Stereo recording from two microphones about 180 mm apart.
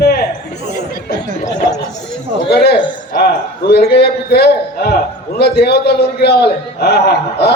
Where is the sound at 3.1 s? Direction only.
60° left (ahead or behind).